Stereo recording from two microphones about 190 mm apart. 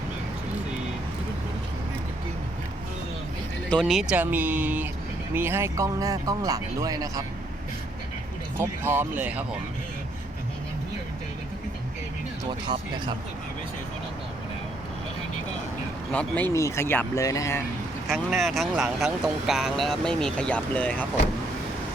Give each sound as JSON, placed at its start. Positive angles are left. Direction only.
{"t": 3.7, "sound": "speech", "side_deg": 5}
{"t": 8.5, "sound": "speech", "side_deg": -10}
{"t": 12.6, "sound": "speech", "side_deg": -25}
{"t": 16.1, "sound": "speech", "side_deg": 10}
{"t": 18.1, "sound": "speech", "side_deg": 0}